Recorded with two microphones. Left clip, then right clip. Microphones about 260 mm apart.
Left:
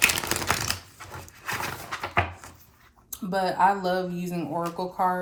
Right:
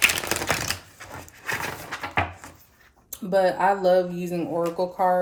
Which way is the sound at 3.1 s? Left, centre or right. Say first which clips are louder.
Right 6 dB; centre.